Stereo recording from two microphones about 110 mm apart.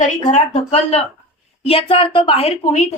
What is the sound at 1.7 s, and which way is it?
A woman's voice, 60° left (ahead or behind).